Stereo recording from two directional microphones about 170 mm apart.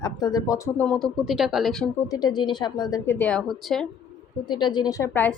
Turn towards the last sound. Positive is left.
turn(degrees=15)  # may be behind; listen again after turning